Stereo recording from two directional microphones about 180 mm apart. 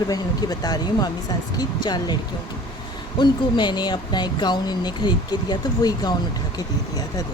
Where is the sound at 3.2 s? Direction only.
25° left (ahead or behind).